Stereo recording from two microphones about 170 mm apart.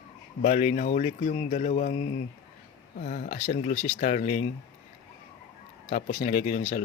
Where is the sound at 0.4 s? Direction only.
40° left (ahead or behind).